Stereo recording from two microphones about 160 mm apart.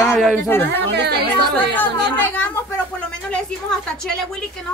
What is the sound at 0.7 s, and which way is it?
Speech, 90° right.